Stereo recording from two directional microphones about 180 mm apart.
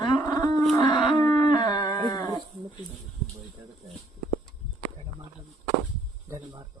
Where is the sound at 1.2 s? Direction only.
25° left (ahead or behind).